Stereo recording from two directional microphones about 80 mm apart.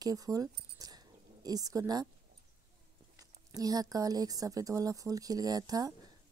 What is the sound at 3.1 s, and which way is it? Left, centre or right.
Speech, right.